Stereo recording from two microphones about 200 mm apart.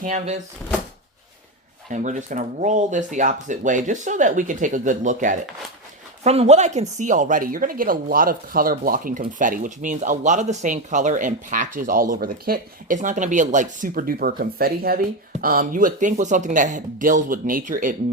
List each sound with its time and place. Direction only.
0.0 s speech: 40° right (ahead or behind)
1.9 s speech: 40° right (ahead or behind)